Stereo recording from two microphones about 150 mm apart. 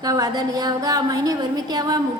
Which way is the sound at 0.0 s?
25° right (ahead or behind).